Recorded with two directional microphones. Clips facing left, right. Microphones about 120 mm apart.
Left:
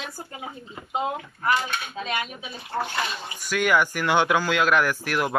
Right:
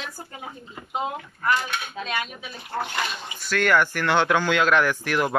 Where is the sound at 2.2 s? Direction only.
25° left (ahead or behind).